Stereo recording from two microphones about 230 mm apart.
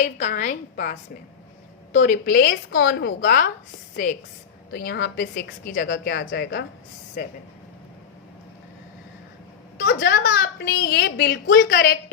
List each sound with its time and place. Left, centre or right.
0.0 s a woman's voice: left
4.7 s a woman's voice: left
9.8 s a woman's voice: left